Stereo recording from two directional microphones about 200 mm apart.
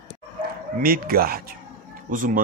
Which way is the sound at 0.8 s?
50° right (ahead or behind).